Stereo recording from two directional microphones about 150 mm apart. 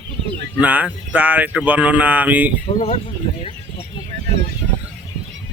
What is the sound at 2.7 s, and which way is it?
Speech, 40° left (ahead or behind).